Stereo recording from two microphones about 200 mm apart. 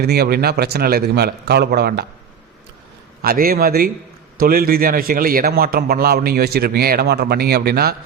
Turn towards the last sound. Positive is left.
turn(degrees=-50)  # may be behind; listen again after turning